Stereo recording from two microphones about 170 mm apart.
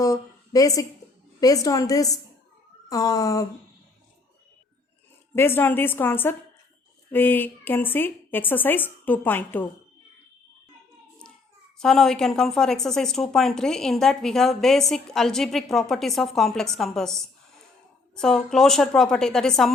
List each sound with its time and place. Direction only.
0.0 s a sound: 20° left (ahead or behind)
1.4 s a woman's voice: 20° left (ahead or behind)
5.3 s a woman's voice: 15° left (ahead or behind)
11.8 s speech: 5° left (ahead or behind)